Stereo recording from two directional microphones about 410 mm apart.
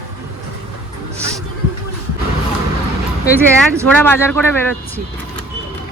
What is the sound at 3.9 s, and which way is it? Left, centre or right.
Speech, centre.